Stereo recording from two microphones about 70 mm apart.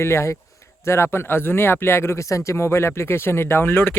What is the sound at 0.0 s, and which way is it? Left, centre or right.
Speech, left.